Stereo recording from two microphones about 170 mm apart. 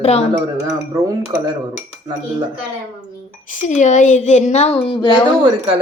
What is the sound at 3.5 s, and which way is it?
A woman's voice, 50° left (ahead or behind).